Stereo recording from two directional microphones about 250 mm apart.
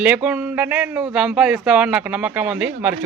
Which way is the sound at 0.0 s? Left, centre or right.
Centre.